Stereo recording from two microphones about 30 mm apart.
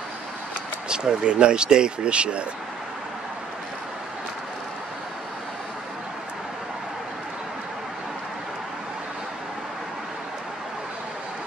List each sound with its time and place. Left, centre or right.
0.8 s speech: right